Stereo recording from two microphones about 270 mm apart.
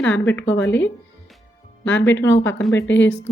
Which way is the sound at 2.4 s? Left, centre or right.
Centre.